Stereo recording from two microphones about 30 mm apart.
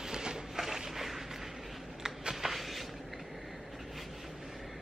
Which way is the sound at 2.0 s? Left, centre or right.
Centre.